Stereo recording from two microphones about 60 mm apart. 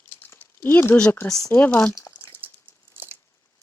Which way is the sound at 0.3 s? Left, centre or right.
Left.